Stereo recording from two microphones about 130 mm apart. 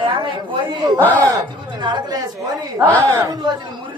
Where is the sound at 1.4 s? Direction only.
35° right (ahead or behind).